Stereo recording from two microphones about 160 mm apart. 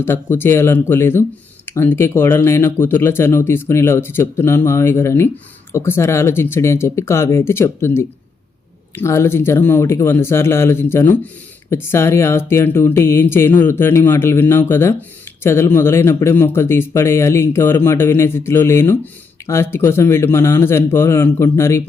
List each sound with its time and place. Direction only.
0.0 s speech: 15° left (ahead or behind)